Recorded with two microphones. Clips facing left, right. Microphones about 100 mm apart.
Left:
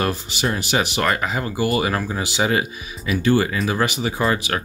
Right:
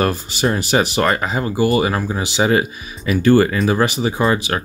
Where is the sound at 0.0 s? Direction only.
40° right (ahead or behind).